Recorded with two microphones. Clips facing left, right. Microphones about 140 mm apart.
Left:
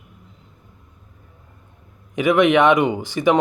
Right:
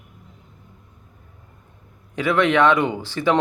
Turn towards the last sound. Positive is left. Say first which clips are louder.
# left 3 dB
turn(degrees=15)  # may be behind; listen again after turning